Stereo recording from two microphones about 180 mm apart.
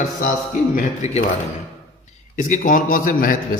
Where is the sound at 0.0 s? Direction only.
50° left (ahead or behind).